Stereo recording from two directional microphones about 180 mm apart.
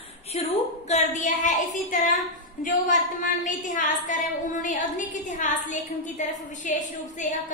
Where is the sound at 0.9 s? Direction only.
40° left (ahead or behind).